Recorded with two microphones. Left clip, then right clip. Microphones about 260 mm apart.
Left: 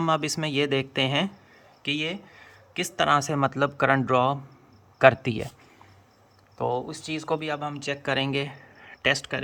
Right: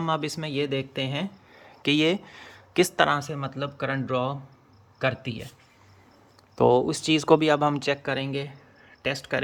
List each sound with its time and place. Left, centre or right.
0.0 s speech: centre
1.8 s speech: right
2.9 s speech: centre
3.2 s speech: centre
6.6 s speech: right
7.8 s speech: centre